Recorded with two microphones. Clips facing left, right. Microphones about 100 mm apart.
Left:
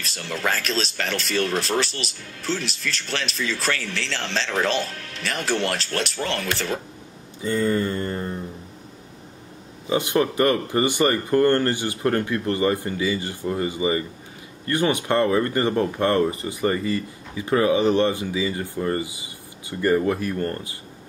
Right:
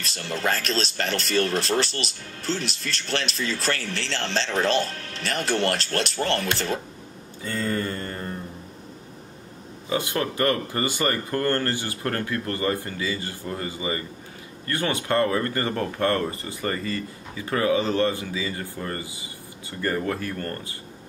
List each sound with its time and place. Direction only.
0.0 s speech: 35° right (ahead or behind)
7.4 s mantra: 20° left (ahead or behind)
9.8 s speech: 20° left (ahead or behind)